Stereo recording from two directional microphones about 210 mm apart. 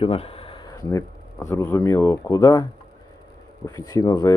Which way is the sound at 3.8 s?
15° left (ahead or behind).